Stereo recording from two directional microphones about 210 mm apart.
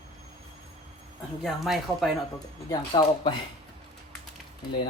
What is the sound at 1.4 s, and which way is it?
Speech, centre (ahead or behind).